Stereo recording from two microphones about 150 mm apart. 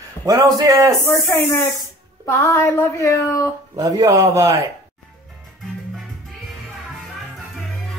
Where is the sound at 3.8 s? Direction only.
20° right (ahead or behind).